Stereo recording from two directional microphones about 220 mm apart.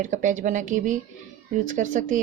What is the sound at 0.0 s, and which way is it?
Speech, 35° right (ahead or behind).